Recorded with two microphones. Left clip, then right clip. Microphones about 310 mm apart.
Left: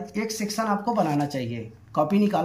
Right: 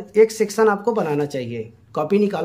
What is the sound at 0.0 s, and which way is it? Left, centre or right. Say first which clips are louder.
Speech: right 15 dB; centre.